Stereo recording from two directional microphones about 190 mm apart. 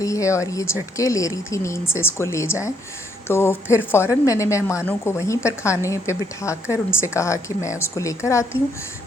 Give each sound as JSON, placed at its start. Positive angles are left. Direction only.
{"t": 0.0, "sound": "a woman's voice", "side_deg": 15}